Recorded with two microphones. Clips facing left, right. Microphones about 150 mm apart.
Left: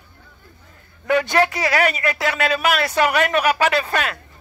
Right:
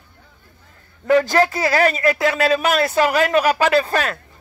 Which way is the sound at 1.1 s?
35° right (ahead or behind).